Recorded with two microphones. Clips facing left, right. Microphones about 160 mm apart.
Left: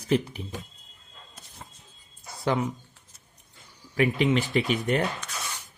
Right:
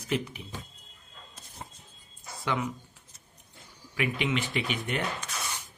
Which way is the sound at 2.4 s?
35° left (ahead or behind).